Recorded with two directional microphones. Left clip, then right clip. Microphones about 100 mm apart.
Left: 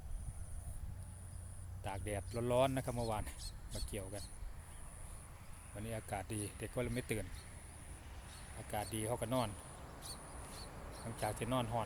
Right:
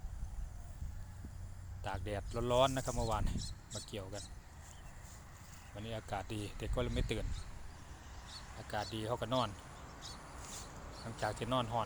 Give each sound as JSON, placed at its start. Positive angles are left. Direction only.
{"t": 1.8, "sound": "speech", "side_deg": 5}
{"t": 3.3, "sound": "speech", "side_deg": -30}
{"t": 3.8, "sound": "speech", "side_deg": 5}
{"t": 5.7, "sound": "speech", "side_deg": 10}
{"t": 8.7, "sound": "speech", "side_deg": 5}
{"t": 9.5, "sound": "a sound", "side_deg": -25}
{"t": 10.2, "sound": "mouse", "side_deg": -25}
{"t": 10.7, "sound": "a sound", "side_deg": -15}
{"t": 10.9, "sound": "speech", "side_deg": 0}